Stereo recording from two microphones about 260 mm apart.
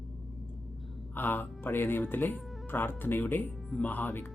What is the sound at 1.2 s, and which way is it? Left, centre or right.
Speech, centre.